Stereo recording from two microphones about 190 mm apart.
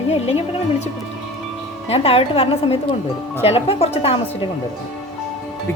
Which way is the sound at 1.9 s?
30° left (ahead or behind).